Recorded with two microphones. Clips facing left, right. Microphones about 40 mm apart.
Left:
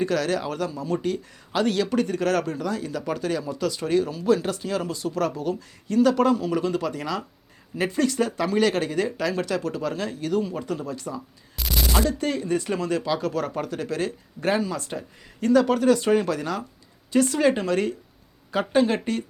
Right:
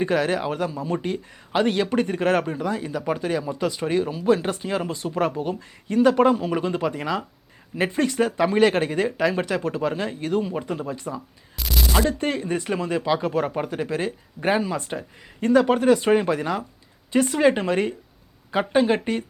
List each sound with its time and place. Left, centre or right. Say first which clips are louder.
0.0 s speech: right 2 dB; right
11.5 s a sound: even; centre
12.0 s speech: right 1 dB; right